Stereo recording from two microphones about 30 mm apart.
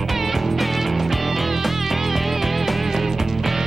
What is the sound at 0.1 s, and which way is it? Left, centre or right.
Music, centre.